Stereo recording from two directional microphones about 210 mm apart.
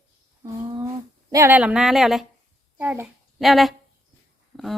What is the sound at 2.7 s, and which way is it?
A child's voice, 5° right (ahead or behind).